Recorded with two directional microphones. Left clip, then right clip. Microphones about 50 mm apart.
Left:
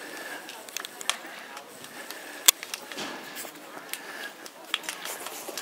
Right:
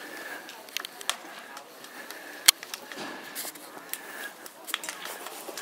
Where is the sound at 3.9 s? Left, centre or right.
Centre.